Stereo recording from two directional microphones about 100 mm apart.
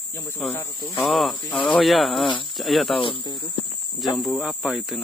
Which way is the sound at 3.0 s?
55° left (ahead or behind).